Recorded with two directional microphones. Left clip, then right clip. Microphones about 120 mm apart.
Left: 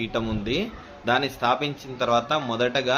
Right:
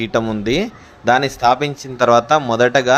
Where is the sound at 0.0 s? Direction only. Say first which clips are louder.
Right 9 dB; 85° right.